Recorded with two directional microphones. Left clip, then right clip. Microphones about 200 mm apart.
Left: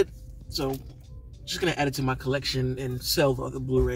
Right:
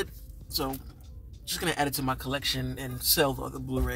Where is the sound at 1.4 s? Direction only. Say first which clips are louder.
Left 2 dB; 20° right (ahead or behind).